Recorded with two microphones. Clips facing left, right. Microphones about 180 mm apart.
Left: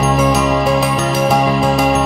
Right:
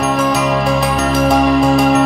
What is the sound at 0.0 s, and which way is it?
Music, centre (ahead or behind).